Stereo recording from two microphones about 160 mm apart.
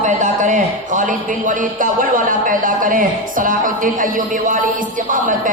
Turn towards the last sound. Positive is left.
turn(degrees=-55)  # may be behind; listen again after turning